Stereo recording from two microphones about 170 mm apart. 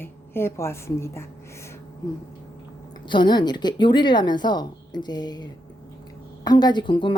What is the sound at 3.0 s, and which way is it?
Speech, 25° left (ahead or behind).